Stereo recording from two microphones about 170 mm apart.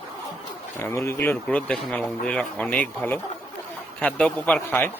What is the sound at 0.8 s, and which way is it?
Speech, 15° left (ahead or behind).